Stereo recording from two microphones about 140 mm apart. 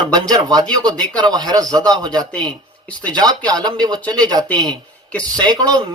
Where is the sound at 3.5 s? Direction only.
30° right (ahead or behind).